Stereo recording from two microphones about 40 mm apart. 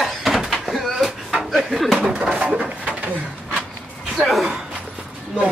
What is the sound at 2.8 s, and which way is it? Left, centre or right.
Bird, right.